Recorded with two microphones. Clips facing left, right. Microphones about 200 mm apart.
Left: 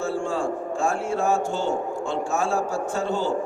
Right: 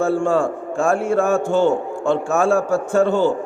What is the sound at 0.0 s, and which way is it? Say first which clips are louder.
A man's voice: right 8 dB; 55° right (ahead or behind).